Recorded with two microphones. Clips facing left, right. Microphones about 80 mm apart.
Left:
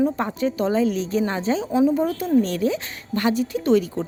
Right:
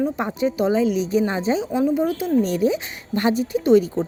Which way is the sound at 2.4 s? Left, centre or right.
Centre.